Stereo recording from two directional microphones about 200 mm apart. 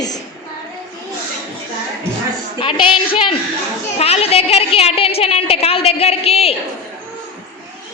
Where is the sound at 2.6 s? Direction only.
25° left (ahead or behind).